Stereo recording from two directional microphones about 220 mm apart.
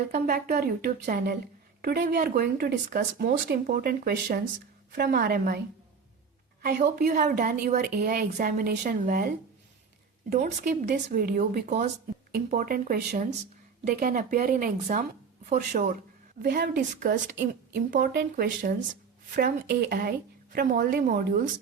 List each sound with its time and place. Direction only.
0.1 s a woman's voice: 45° right (ahead or behind)
6.6 s a woman's voice: 45° right (ahead or behind)
7.0 s a woman's voice: 35° right (ahead or behind)